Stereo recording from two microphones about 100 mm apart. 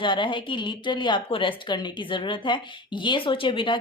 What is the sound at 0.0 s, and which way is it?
A woman's voice, 55° left (ahead or behind).